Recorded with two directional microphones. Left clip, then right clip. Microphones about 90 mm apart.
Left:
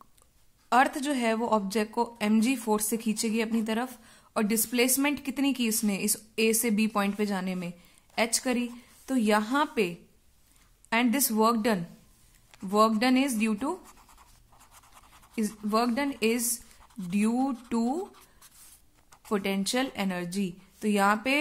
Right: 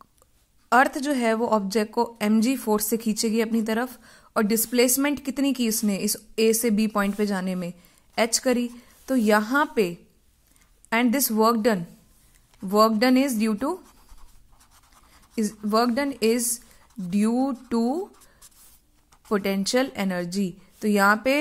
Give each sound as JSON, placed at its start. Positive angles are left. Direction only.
{"t": 0.7, "sound": "a woman's voice", "side_deg": -40}
{"t": 15.7, "sound": "a woman's voice", "side_deg": -40}
{"t": 19.3, "sound": "a woman's voice", "side_deg": -40}